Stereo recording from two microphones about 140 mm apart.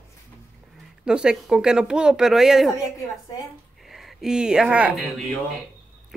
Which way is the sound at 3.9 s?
Centre (ahead or behind).